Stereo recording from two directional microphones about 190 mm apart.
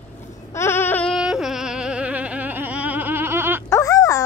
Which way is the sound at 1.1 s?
5° right (ahead or behind).